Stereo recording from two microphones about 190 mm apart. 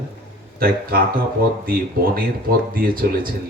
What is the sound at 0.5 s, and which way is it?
Speech, 50° right (ahead or behind).